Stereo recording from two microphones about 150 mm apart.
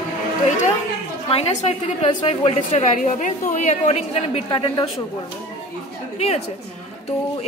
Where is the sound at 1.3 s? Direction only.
45° left (ahead or behind).